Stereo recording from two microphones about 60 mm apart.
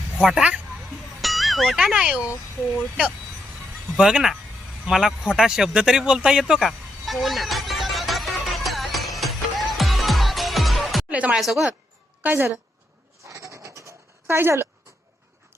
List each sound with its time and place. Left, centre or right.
0.2 s speech: centre
1.2 s a sound: centre
1.8 s speech: centre
3.9 s a woman's voice: centre
6.4 s music: centre
11.1 s speech: right
11.3 s a woman's voice: centre
12.2 s a woman's voice: right
13.2 s bleat: right
14.3 s speech: right